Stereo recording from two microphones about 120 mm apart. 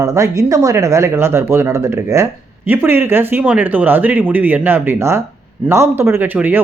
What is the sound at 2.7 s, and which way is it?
Speech, 20° right (ahead or behind).